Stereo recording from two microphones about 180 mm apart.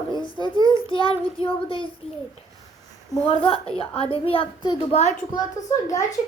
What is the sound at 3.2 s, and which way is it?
Child singing, 30° left (ahead or behind).